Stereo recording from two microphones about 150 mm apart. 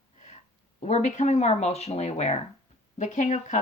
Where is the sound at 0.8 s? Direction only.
50° left (ahead or behind).